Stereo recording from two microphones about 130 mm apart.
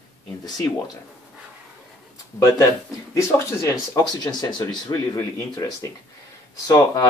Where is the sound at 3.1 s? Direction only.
25° left (ahead or behind).